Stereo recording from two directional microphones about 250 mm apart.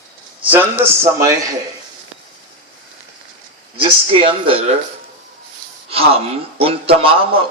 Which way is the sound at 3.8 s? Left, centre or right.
Right.